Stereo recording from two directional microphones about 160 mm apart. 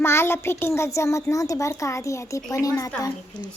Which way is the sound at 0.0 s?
15° left (ahead or behind).